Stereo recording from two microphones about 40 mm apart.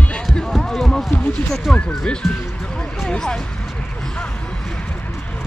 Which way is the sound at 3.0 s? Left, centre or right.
Centre.